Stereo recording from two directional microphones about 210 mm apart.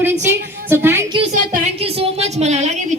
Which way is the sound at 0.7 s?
10° right (ahead or behind).